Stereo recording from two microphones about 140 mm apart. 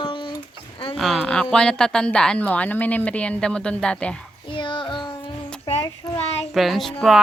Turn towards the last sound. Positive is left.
turn(degrees=0)  # may be behind; listen again after turning